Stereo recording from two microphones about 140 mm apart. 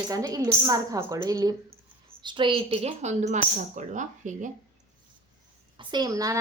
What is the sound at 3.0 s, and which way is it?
Speech, 55° right (ahead or behind).